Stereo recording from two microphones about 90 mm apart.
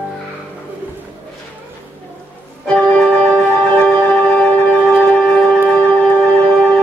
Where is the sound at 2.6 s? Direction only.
15° left (ahead or behind).